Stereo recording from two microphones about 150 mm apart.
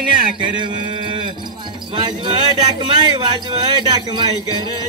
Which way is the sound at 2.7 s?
35° right (ahead or behind).